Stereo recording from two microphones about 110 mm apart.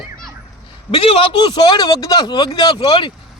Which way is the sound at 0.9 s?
55° left (ahead or behind).